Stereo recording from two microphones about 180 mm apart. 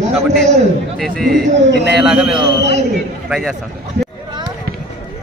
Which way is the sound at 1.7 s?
70° right (ahead or behind).